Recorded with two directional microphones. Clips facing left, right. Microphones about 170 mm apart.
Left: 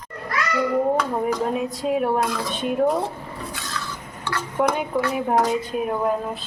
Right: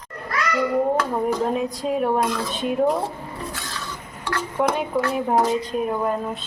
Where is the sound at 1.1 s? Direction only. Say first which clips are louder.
Right 1 dB; centre (ahead or behind).